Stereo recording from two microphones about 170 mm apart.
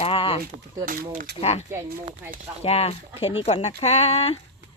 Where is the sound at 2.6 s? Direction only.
35° left (ahead or behind).